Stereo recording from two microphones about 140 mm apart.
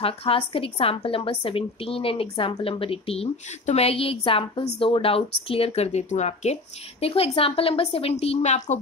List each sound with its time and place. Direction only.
0.0 s a woman's voice: 40° left (ahead or behind)